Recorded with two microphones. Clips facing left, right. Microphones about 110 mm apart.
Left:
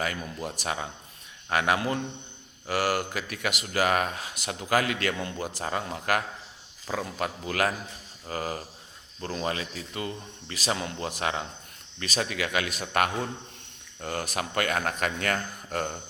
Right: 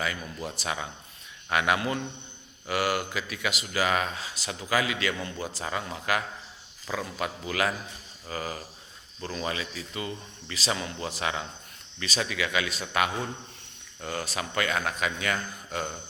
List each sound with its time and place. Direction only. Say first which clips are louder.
0.6 s a man's voice: left 1 dB; 40° left (ahead or behind)